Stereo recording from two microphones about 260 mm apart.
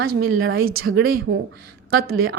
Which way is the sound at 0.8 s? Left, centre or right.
Right.